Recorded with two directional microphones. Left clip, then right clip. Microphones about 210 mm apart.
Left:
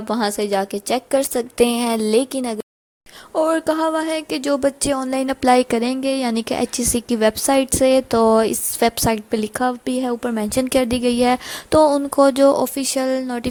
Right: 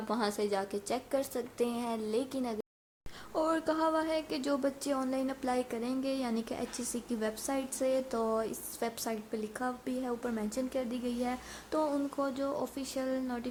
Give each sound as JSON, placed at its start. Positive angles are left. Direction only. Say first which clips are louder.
{"t": 0.1, "sound": "music", "louder": "left 13 dB", "side_deg": 35}